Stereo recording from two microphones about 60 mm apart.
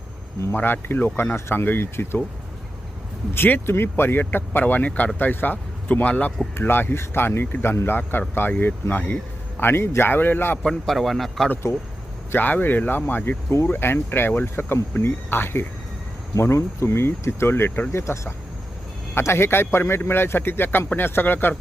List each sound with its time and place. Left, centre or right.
0.5 s a man's voice: left
3.3 s a man's voice: left
5.1 s speech: left
6.5 s a man's voice: left
10.6 s speech: centre
11.6 s speech: left
12.3 s a man's voice: left
16.3 s a man's voice: left